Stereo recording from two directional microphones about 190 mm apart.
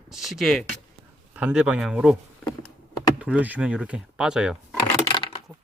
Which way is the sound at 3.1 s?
5° right (ahead or behind).